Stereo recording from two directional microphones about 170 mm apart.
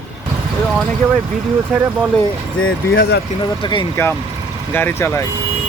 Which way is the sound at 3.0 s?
80° left.